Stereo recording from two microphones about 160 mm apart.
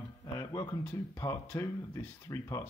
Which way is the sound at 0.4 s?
20° left (ahead or behind).